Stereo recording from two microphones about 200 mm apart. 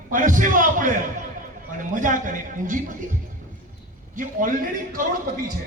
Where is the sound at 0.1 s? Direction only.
40° right (ahead or behind).